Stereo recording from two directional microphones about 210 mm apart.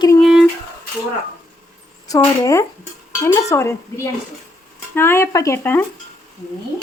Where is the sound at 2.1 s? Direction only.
15° left (ahead or behind).